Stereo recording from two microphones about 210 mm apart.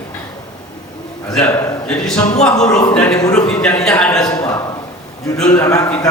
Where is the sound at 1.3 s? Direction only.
5° left (ahead or behind).